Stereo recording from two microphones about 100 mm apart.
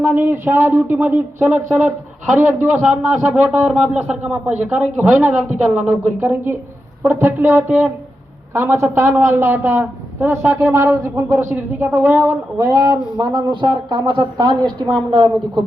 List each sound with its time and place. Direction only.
0.0 s a woman's voice: 20° right (ahead or behind)
12.7 s a woman's voice: 45° right (ahead or behind)
13.9 s a woman's voice: 40° right (ahead or behind)